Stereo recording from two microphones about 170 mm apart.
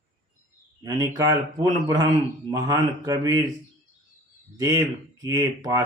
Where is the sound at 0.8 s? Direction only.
25° right (ahead or behind).